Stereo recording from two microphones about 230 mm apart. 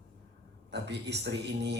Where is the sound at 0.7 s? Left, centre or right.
Right.